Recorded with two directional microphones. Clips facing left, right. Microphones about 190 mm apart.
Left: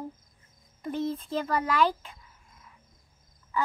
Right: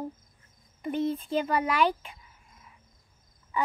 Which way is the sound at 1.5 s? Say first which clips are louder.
Left 1 dB; 10° right (ahead or behind).